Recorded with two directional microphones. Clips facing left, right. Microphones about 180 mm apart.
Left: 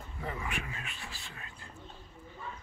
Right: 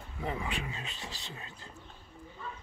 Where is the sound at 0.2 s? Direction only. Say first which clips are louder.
Right 3 dB; 20° right (ahead or behind).